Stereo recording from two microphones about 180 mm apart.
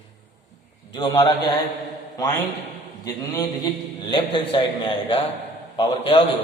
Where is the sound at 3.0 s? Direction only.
20° left (ahead or behind).